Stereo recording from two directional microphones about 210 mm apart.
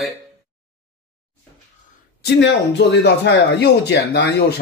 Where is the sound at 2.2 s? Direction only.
55° left (ahead or behind).